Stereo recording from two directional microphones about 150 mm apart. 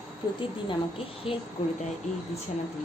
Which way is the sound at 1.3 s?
35° left (ahead or behind).